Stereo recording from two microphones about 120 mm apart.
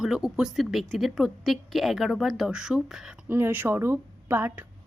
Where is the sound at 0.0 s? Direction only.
5° right (ahead or behind).